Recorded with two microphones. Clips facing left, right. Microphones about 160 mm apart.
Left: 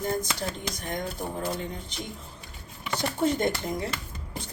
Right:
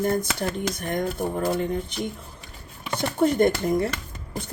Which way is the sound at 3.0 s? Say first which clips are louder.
Right 6 dB; 55° right (ahead or behind).